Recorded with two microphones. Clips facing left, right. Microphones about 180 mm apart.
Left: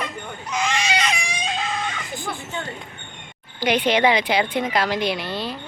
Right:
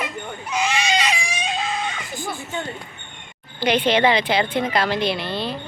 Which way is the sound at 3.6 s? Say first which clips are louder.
Right 1 dB; 10° left (ahead or behind).